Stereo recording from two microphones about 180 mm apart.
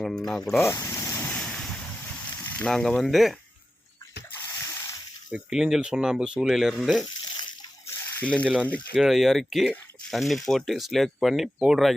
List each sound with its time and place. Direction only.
0.3 s speech: 5° left (ahead or behind)
0.6 s boat: 15° left (ahead or behind)
2.4 s speech: 5° left (ahead or behind)
4.4 s a sound: 15° left (ahead or behind)
5.3 s speech: 5° right (ahead or behind)
7.9 s a sound: 10° left (ahead or behind)
8.6 s speech: 5° left (ahead or behind)